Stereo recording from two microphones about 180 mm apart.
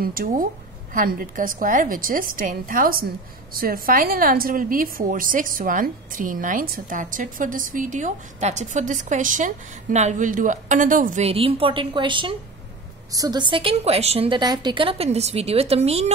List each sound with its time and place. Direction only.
0.0 s a woman's voice: 50° right (ahead or behind); by 16.1 s 35° right (ahead or behind)